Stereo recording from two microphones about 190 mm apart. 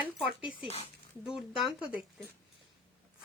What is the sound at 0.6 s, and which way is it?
Speech, 30° left (ahead or behind).